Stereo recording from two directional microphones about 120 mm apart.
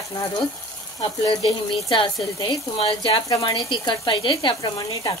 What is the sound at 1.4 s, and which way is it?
A woman's voice, 40° left (ahead or behind).